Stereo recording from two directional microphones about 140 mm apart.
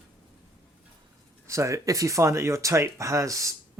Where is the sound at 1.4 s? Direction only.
20° right (ahead or behind).